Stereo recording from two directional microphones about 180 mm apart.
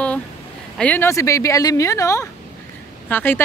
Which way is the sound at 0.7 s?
10° left (ahead or behind).